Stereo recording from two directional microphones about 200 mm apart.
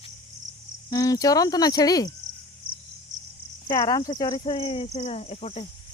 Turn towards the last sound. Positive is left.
turn(degrees=30)  # may be behind; listen again after turning